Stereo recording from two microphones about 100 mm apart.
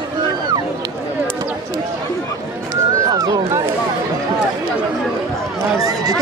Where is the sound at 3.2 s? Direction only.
35° right (ahead or behind).